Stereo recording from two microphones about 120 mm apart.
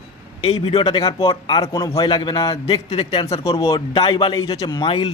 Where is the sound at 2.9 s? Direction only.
50° left (ahead or behind).